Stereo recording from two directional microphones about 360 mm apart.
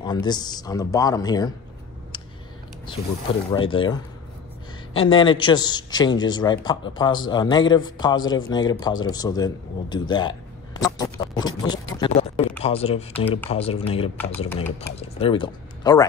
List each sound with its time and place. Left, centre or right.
0.0 s speech: centre
3.5 s speech: centre
12.0 s a sound: centre
12.6 s speech: centre